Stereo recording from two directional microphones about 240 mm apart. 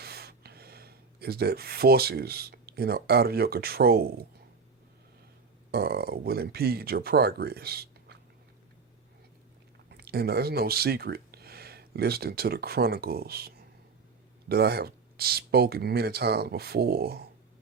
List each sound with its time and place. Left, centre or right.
0.0 s speech: right
5.7 s speech: right
9.9 s speech: right